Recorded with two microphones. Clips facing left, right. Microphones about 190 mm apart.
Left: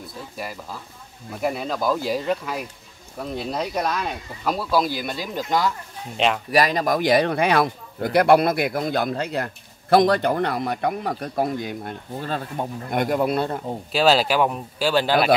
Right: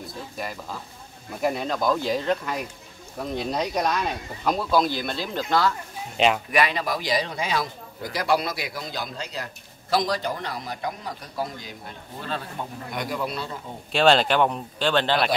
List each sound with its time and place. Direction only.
0.4 s speech: 5° left (ahead or behind)
6.1 s speech: centre (ahead or behind)
6.5 s a man's voice: 40° left (ahead or behind)
13.9 s speech: 5° left (ahead or behind)